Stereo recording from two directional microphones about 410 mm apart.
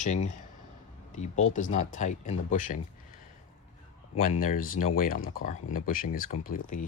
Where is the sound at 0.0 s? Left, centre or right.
Centre.